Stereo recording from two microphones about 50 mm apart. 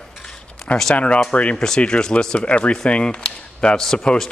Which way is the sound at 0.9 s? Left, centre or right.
Left.